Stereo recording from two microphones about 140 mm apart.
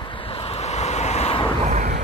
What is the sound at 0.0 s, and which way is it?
Vehicle, 40° left (ahead or behind).